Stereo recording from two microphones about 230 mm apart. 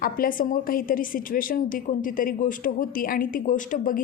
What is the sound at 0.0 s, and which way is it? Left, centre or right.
A woman's voice, left.